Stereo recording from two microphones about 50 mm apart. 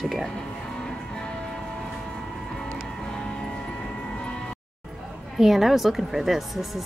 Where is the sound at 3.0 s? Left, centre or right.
Centre.